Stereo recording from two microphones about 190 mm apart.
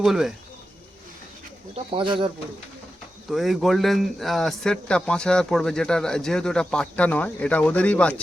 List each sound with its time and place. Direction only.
0.0 s speech: centre (ahead or behind)
1.7 s speech: 30° right (ahead or behind)
3.2 s speech: centre (ahead or behind)